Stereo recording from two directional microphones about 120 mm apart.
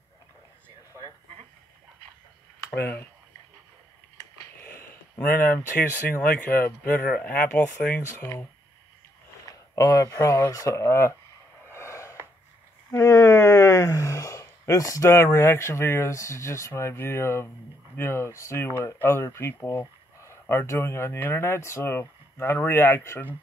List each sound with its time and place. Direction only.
2.7 s speech: 15° left (ahead or behind)
5.1 s speech: 20° left (ahead or behind)
9.5 s speech: 30° left (ahead or behind)
11.6 s a sound: 20° left (ahead or behind)
12.9 s speech: 30° left (ahead or behind)